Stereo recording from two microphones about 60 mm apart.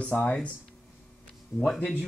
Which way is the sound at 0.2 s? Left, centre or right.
Left.